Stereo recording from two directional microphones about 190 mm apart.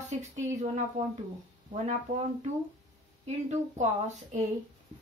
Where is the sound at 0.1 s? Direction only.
40° right (ahead or behind).